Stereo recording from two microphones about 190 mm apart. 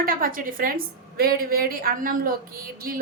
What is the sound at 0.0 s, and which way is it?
A woman's voice, 50° right (ahead or behind).